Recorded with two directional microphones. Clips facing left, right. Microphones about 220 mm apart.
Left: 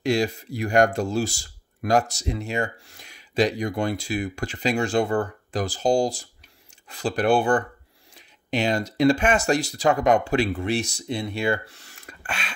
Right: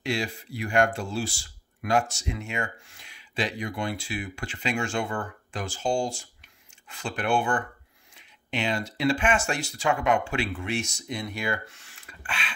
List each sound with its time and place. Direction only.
0.0 s speech: 40° left (ahead or behind)